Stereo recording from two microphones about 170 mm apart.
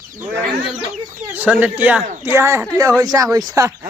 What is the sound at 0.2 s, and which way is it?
Speech, 10° right (ahead or behind).